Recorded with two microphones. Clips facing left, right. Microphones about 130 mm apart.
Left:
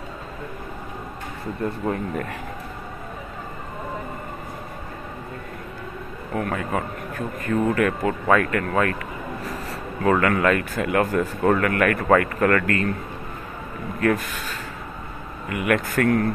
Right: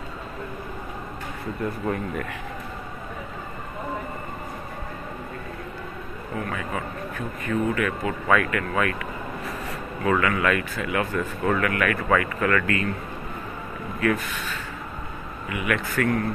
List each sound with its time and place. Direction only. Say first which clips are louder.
6.3 s speech: left 5 dB; 50° left (ahead or behind)
9.4 s a sound: left 1 dB; 35° left (ahead or behind)
10.2 s speech: left 3 dB; 45° left (ahead or behind)
13.9 s speech: left 2 dB; 40° left (ahead or behind)